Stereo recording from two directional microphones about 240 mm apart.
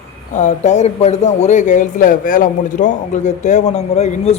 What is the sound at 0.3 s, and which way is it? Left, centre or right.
Speech, left.